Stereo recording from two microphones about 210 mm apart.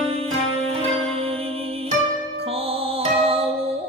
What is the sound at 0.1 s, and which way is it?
Music, 30° right (ahead or behind).